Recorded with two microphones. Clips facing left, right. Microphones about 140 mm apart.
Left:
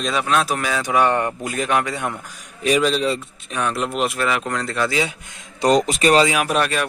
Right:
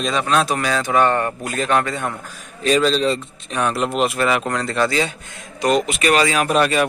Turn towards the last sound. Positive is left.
turn(degrees=0)  # may be behind; listen again after turning